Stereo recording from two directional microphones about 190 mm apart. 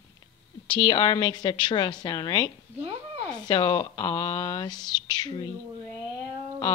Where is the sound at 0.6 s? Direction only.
25° left (ahead or behind).